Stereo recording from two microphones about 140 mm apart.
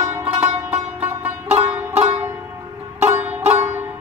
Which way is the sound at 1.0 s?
15° right (ahead or behind).